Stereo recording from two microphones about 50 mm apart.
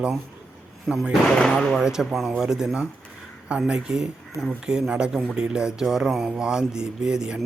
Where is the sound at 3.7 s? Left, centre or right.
Centre.